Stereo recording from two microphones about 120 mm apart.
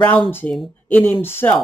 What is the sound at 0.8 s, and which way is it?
Speech, 15° left (ahead or behind).